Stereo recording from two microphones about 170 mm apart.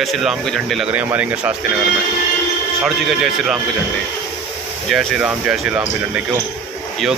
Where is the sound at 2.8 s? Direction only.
Centre (ahead or behind).